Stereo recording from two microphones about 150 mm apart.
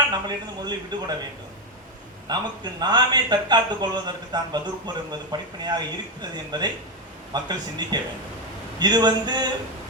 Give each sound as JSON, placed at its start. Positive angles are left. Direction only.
{"t": 0.1, "sound": "speech", "side_deg": -30}
{"t": 2.2, "sound": "speech", "side_deg": -30}